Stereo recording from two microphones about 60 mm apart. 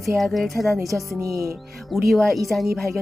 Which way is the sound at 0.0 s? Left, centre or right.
Centre.